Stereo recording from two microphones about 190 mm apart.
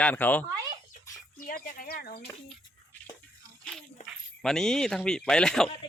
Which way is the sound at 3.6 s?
Centre (ahead or behind).